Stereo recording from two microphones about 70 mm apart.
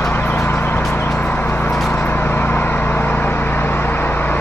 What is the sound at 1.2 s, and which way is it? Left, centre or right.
Vehicle, centre.